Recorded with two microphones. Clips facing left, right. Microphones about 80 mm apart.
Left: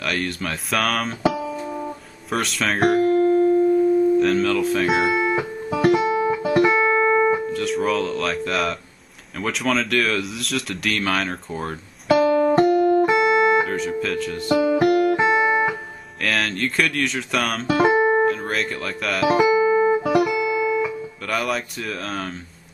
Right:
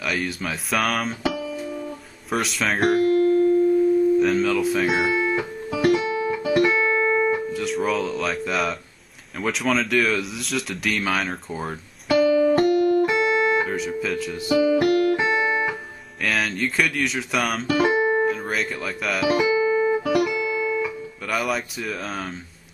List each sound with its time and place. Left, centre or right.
0.0 s speech: centre
4.2 s music: centre
7.5 s speech: centre
12.5 s music: centre
13.7 s speech: centre
14.6 s music: centre
16.2 s speech: centre
19.3 s music: centre
20.2 s music: centre
21.3 s speech: centre